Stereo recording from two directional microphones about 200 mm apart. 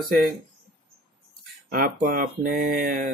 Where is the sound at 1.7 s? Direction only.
45° right (ahead or behind).